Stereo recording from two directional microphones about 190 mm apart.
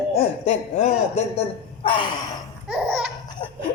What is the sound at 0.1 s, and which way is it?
Speech, 35° left (ahead or behind).